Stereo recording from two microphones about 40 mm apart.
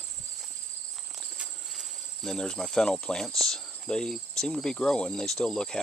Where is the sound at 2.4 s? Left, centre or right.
Centre.